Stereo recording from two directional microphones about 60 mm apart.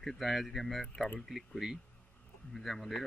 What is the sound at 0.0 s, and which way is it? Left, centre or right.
Speech, centre.